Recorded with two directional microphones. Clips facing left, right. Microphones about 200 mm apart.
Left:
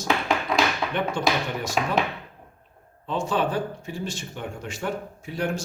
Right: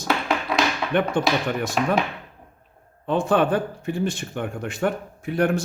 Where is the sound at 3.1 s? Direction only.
55° right (ahead or behind).